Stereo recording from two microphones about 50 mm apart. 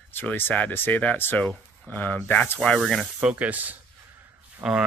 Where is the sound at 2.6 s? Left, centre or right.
Centre.